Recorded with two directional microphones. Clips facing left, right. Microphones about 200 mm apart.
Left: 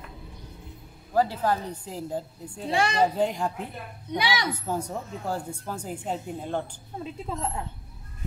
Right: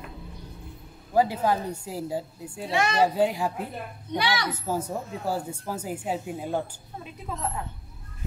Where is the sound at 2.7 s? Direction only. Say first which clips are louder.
Even; 30° left (ahead or behind).